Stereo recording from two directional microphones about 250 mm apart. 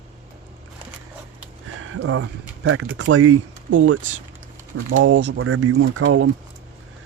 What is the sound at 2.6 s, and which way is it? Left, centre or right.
Speech, right.